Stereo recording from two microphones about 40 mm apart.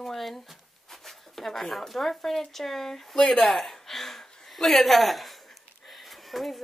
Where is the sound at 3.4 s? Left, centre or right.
Centre.